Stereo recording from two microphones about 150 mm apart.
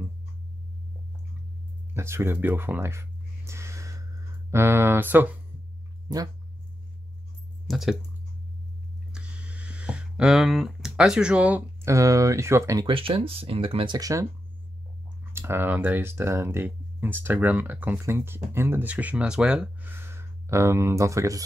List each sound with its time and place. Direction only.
2.0 s a sound: 15° right (ahead or behind)
4.5 s speech: 15° right (ahead or behind)
6.0 s speech: 25° right (ahead or behind)
7.6 s speech: centre (ahead or behind)
9.1 s a sound: 5° right (ahead or behind)
11.9 s speech: 20° right (ahead or behind)
12.8 s speech: 35° right (ahead or behind)
13.9 s speech: 25° right (ahead or behind)
15.3 s speech: 15° right (ahead or behind)